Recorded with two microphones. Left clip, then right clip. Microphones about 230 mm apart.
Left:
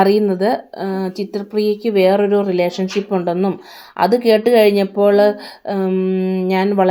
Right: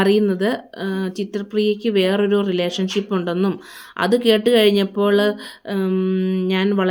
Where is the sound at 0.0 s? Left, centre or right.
Centre.